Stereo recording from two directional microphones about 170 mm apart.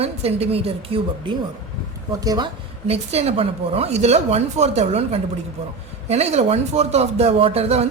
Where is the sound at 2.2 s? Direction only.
20° right (ahead or behind).